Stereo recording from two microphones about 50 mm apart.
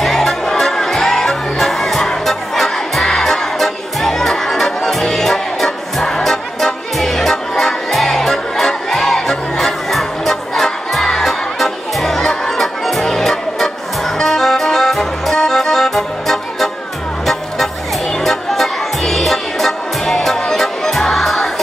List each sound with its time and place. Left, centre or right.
0.0 s music: centre
18.2 s music: centre